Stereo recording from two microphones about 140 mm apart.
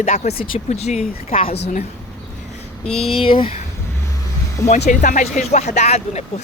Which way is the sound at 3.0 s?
40° left (ahead or behind).